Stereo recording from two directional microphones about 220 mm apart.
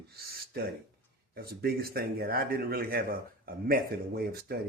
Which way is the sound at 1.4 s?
45° right (ahead or behind).